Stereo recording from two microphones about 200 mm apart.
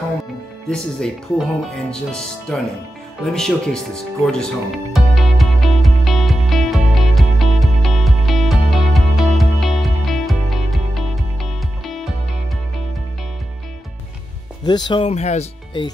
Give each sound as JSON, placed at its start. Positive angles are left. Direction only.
{"t": 0.7, "sound": "speech", "side_deg": 5}
{"t": 3.3, "sound": "music", "side_deg": 5}
{"t": 14.6, "sound": "speech", "side_deg": 20}